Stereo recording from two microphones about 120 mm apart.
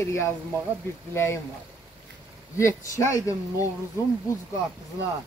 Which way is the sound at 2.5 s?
25° left (ahead or behind).